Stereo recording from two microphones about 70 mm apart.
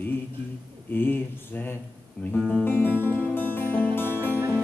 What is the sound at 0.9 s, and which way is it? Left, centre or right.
Speech, left.